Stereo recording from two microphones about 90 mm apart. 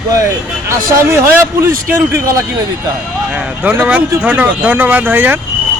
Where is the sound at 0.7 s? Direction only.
35° right (ahead or behind).